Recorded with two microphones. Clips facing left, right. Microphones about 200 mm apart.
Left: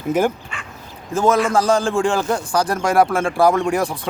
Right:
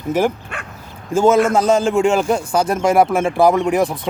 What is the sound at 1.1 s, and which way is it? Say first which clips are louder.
Speech: right 3 dB; 25° right (ahead or behind).